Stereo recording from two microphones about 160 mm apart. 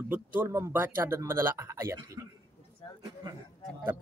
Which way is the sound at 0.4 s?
15° right (ahead or behind).